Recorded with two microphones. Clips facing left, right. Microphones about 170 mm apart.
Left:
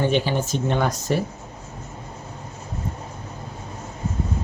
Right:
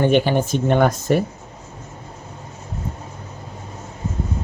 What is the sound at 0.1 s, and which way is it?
Speech, 55° right (ahead or behind).